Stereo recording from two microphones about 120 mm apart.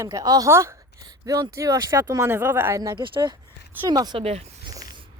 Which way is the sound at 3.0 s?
40° right (ahead or behind).